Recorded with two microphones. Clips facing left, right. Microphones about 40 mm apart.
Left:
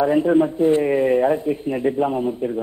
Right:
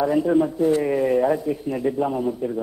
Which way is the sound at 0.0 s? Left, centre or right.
Left.